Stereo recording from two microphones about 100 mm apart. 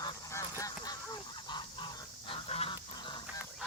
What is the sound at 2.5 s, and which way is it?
Duck, 90° left.